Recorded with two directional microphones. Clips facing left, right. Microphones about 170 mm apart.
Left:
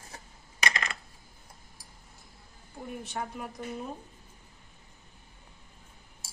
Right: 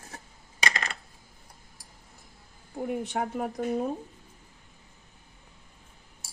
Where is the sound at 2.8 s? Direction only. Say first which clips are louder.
Right 7 dB; 75° right (ahead or behind); by 3.8 s 60° right (ahead or behind).